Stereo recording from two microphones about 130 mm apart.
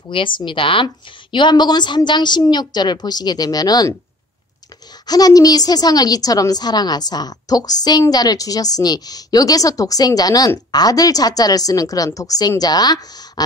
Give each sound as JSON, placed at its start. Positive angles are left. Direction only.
{"t": 0.1, "sound": "a woman's voice", "side_deg": 40}
{"t": 5.0, "sound": "a woman's voice", "side_deg": 30}